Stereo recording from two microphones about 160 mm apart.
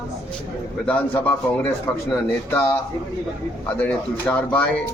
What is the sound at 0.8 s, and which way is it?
A man's voice, 10° left (ahead or behind).